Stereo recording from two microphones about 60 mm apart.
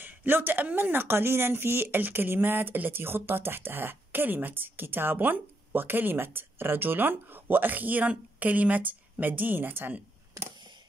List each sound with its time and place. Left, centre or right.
0.0 s speech: right